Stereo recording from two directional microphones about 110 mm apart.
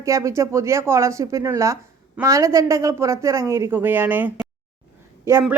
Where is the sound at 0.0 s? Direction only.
25° right (ahead or behind).